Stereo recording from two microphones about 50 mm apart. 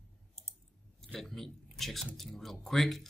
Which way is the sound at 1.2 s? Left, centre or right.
Centre.